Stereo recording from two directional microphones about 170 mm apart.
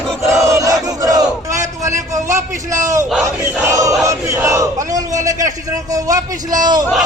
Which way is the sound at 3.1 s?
15° right (ahead or behind).